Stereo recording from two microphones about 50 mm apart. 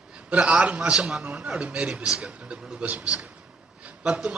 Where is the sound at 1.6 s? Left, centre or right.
Right.